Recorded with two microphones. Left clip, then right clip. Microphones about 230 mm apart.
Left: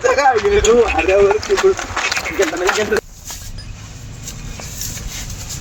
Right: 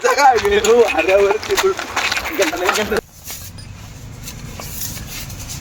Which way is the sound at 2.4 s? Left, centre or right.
Right.